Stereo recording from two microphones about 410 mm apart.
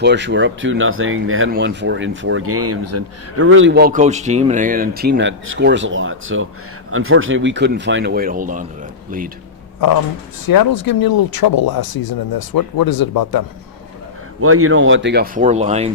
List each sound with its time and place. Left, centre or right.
0.0 s speech: right
10.4 s speech: left
14.4 s speech: right; by 15.9 s centre